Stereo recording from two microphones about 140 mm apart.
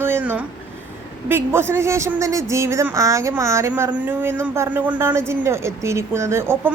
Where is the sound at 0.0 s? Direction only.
15° right (ahead or behind).